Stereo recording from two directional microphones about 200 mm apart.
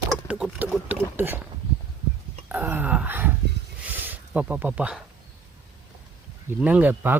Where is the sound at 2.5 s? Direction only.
10° right (ahead or behind).